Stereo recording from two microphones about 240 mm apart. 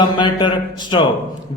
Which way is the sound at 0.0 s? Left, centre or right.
Centre.